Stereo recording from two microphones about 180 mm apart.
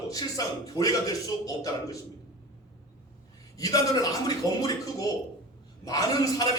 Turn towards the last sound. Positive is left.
turn(degrees=20)  # may be behind; listen again after turning